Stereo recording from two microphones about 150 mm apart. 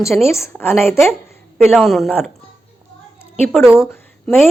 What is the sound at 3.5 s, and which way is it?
Speech, centre (ahead or behind).